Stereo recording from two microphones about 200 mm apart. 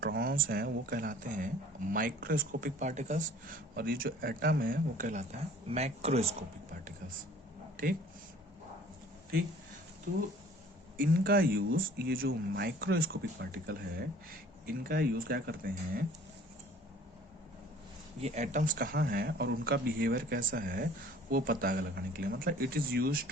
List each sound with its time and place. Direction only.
0.2 s speech: 45° right (ahead or behind); by 6.3 s 30° right (ahead or behind)
10.1 s speech: 55° right (ahead or behind)
18.2 s speech: 35° right (ahead or behind); by 23.3 s 50° right (ahead or behind)